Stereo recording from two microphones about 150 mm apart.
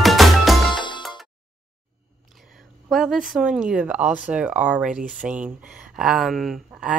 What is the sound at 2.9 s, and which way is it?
Speech, centre (ahead or behind).